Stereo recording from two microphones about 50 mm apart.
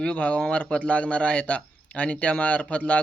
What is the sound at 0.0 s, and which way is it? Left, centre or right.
Speech, left.